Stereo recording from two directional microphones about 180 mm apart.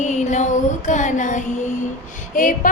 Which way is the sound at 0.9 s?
45° left (ahead or behind).